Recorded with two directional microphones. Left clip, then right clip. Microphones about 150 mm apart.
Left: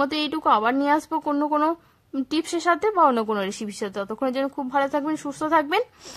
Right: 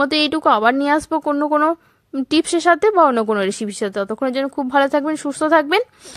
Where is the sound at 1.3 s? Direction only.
15° right (ahead or behind).